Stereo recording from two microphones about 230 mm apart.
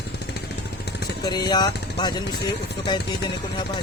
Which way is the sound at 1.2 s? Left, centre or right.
Centre.